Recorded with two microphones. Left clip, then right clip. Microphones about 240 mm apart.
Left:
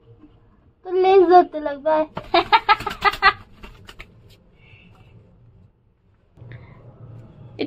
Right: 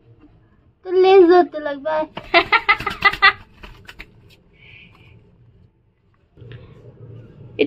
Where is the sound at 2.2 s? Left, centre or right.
Centre.